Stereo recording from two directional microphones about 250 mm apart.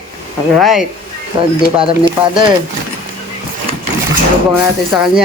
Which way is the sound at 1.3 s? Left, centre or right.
Centre.